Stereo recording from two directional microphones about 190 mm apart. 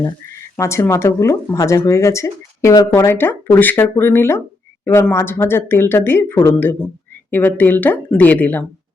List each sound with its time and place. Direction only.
0.5 s speech: 15° left (ahead or behind)